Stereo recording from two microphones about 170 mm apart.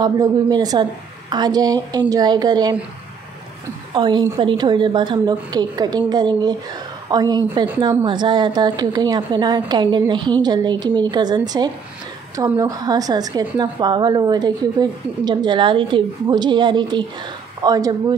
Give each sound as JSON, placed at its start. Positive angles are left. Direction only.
{"t": 0.0, "sound": "a woman's voice", "side_deg": -25}
{"t": 3.9, "sound": "a woman's voice", "side_deg": -25}